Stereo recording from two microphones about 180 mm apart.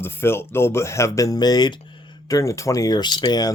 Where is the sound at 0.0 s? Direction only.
15° left (ahead or behind).